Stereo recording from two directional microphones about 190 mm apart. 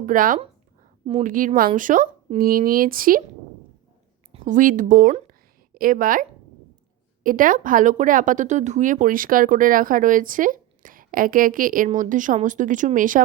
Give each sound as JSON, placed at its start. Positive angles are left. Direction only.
{"t": 0.0, "sound": "speech", "side_deg": -45}
{"t": 4.3, "sound": "a woman's voice", "side_deg": -40}